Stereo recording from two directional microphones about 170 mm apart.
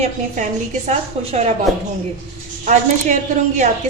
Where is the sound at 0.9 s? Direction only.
35° right (ahead or behind).